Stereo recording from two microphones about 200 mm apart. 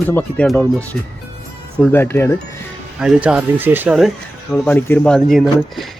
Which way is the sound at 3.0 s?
5° right (ahead or behind).